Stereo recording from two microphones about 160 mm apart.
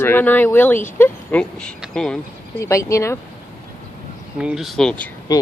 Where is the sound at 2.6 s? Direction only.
20° left (ahead or behind).